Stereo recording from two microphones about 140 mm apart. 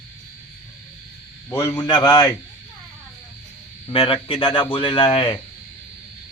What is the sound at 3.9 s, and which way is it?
A man's voice, 40° left (ahead or behind).